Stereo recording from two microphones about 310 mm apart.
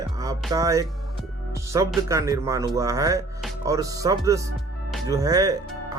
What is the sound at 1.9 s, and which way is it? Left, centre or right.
Speech, centre.